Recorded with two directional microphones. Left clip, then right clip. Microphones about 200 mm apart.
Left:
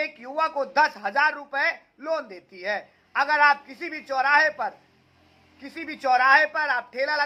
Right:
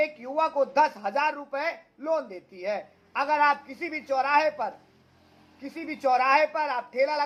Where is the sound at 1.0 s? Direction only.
20° left (ahead or behind).